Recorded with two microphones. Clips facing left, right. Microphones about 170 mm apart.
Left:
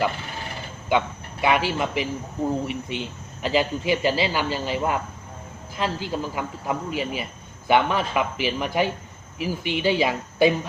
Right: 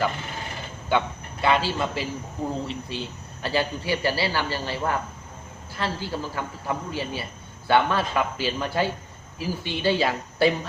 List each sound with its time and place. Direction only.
0.9 s a man's voice: 15° left (ahead or behind)